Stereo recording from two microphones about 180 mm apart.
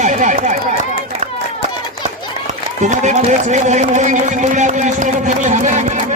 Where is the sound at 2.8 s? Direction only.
40° right (ahead or behind).